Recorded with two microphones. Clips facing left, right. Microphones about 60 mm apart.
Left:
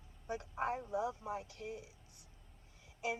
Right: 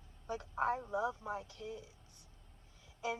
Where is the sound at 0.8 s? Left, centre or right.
Right.